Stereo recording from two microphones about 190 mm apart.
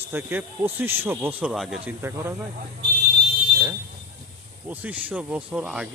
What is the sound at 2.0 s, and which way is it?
Speech, 10° right (ahead or behind).